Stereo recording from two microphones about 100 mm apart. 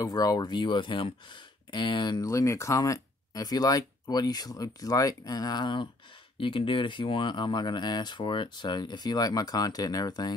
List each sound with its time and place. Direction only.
0.0 s speech: 40° left (ahead or behind)
2.2 s speech: 30° left (ahead or behind)